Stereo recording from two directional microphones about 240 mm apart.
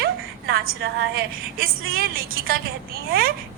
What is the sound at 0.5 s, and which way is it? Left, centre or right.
A woman's voice, right.